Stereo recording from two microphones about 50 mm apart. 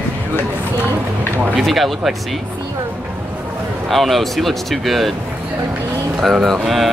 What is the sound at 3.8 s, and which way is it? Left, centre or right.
A woman's voice, centre.